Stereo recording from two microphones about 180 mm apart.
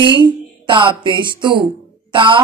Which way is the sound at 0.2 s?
25° right (ahead or behind).